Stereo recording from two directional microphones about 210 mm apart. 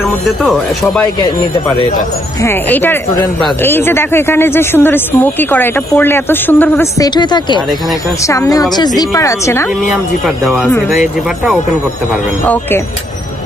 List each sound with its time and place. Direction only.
0.4 s speech: centre (ahead or behind)
2.4 s speech: 10° left (ahead or behind)
10.2 s speech: centre (ahead or behind)